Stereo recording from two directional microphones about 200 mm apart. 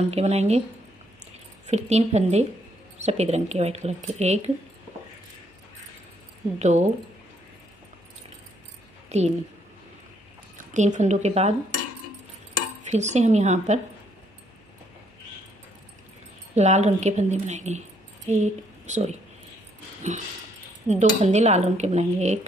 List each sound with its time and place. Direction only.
0.1 s speech: 30° right (ahead or behind)
1.7 s speech: 35° right (ahead or behind)
6.6 s speech: 35° right (ahead or behind)
9.1 s speech: 35° right (ahead or behind)
10.7 s speech: 40° right (ahead or behind)
12.9 s speech: 35° right (ahead or behind)
16.5 s speech: 35° right (ahead or behind)